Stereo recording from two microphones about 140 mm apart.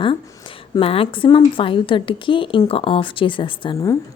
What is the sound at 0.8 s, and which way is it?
A woman's voice, 40° left (ahead or behind).